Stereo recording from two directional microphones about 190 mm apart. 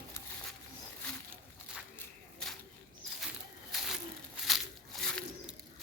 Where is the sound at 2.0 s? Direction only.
5° left (ahead or behind).